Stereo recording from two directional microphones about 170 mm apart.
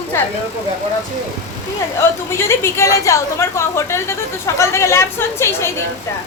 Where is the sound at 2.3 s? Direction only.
15° left (ahead or behind).